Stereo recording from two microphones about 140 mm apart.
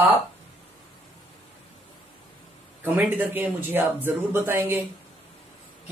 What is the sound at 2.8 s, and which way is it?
A man's voice, 15° right (ahead or behind).